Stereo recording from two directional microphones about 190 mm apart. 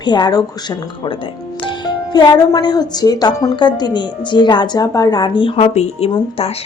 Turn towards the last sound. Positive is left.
turn(degrees=30)  # may be behind; listen again after turning